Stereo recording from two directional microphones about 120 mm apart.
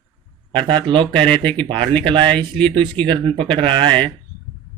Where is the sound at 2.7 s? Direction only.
45° right (ahead or behind).